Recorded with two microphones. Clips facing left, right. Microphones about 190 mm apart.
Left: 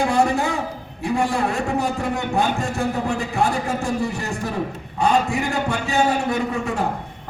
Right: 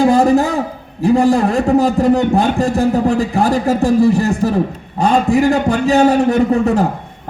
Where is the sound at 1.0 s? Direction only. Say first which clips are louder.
Right 9 dB; 35° right (ahead or behind).